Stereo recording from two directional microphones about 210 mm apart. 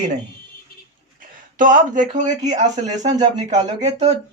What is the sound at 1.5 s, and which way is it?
Speech, 40° right (ahead or behind).